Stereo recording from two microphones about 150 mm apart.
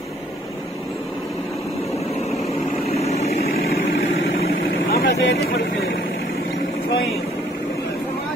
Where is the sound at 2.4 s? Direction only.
45° left (ahead or behind).